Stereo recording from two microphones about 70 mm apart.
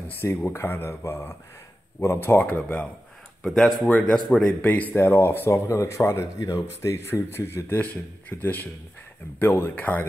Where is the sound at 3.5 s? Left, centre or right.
Centre.